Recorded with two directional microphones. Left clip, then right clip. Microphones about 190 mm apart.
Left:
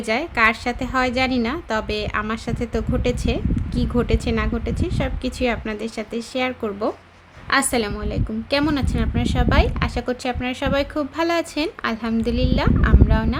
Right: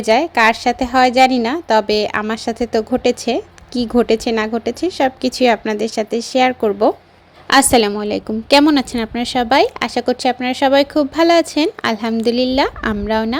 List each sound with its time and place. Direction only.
0.0 s a woman's voice: 30° right (ahead or behind)